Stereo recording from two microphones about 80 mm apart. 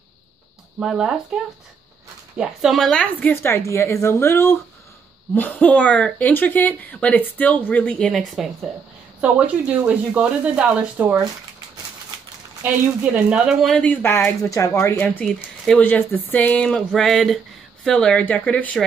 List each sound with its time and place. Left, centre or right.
0.7 s speech: centre
2.9 s a sound: centre
3.4 s speech: left
5.3 s a sound: left
6.3 s speech: left
8.1 s speech: centre
9.2 s speech: centre
12.6 s speech: centre
14.0 s speech: left
15.0 s a sound: centre
15.2 s speech: centre
15.8 s a sound: left